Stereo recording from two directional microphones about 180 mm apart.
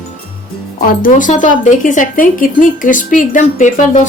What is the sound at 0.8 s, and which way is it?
Speech, 50° left (ahead or behind).